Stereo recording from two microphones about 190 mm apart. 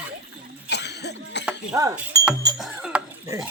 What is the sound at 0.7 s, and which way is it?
Speech, 60° left (ahead or behind).